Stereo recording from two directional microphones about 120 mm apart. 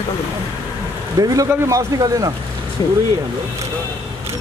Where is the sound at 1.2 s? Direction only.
30° right (ahead or behind).